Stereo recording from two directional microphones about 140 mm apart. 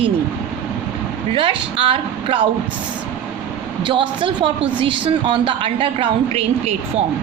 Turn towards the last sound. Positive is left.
turn(degrees=-50)  # may be behind; listen again after turning